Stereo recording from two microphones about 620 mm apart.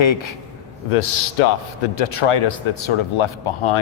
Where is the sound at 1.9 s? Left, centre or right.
Left.